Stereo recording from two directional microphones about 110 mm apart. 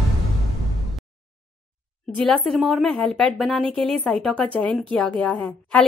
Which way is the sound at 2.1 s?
5° left (ahead or behind).